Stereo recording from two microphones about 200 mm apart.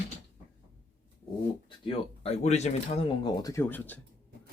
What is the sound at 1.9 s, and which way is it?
Speech, 30° left (ahead or behind).